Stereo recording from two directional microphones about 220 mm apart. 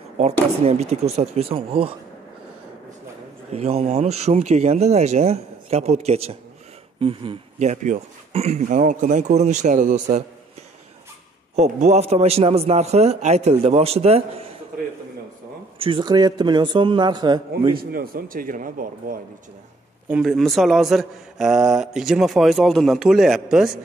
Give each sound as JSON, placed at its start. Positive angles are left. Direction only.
{"t": 0.7, "sound": "speech", "side_deg": -30}
{"t": 3.5, "sound": "speech", "side_deg": -30}
{"t": 11.5, "sound": "speech", "side_deg": -30}
{"t": 15.8, "sound": "speech", "side_deg": -20}
{"t": 17.7, "sound": "speech", "side_deg": -40}
{"t": 20.1, "sound": "a man's voice", "side_deg": 0}